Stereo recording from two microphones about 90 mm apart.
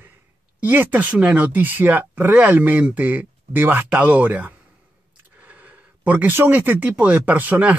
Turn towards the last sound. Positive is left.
turn(degrees=-15)  # may be behind; listen again after turning